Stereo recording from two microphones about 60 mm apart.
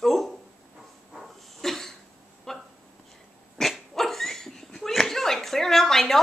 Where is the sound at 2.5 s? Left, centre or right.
Centre.